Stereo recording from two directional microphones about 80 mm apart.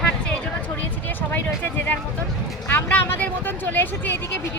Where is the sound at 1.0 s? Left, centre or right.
Left.